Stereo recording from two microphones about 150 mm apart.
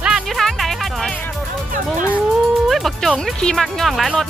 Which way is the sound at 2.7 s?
Centre (ahead or behind).